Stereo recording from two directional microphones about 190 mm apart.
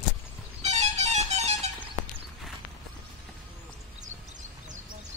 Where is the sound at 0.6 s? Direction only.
35° right (ahead or behind).